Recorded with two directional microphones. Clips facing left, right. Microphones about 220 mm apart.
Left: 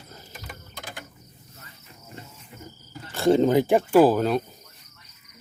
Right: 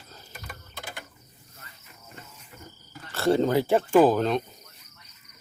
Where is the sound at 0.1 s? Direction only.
15° left (ahead or behind).